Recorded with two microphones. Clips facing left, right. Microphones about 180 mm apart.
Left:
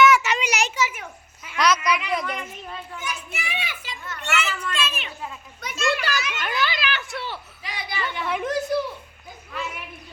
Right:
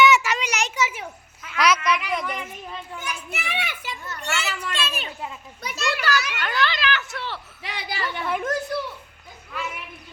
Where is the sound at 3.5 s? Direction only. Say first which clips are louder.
Right 3 dB; 55° right (ahead or behind).